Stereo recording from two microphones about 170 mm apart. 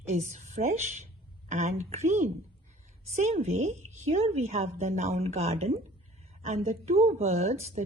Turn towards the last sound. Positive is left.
turn(degrees=-40)  # may be behind; listen again after turning